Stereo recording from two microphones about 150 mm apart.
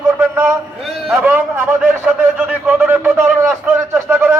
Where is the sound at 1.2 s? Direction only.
10° right (ahead or behind).